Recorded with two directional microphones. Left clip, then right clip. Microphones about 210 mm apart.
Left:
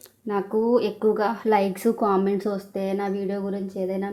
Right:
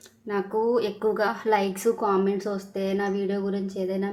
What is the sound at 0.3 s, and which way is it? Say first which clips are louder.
A woman's voice: left 2 dB; 25° left (ahead or behind).